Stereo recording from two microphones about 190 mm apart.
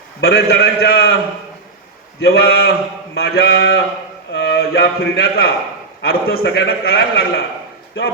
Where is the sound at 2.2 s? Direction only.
55° left (ahead or behind).